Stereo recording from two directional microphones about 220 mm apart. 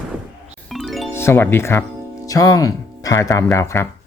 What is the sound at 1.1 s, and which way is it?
Speech, 10° left (ahead or behind).